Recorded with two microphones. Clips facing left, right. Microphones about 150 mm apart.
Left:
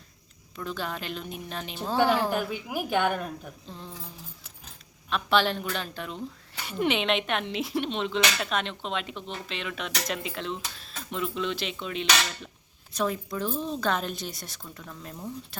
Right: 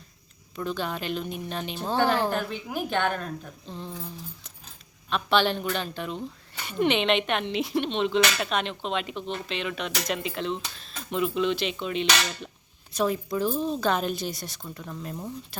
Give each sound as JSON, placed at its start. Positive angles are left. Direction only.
{"t": 0.5, "sound": "speech", "side_deg": 0}
{"t": 5.0, "sound": "speech", "side_deg": 0}